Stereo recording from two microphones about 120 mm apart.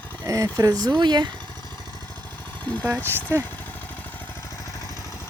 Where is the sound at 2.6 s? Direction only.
15° left (ahead or behind).